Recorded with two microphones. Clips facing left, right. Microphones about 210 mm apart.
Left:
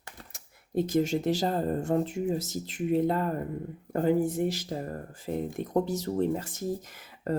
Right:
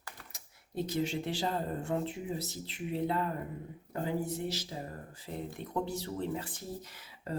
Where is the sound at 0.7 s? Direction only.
45° left (ahead or behind).